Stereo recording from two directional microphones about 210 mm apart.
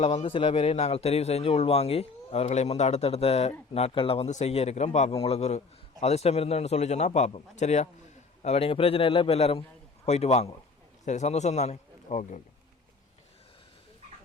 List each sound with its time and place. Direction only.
0.0 s a man's voice: 30° left (ahead or behind)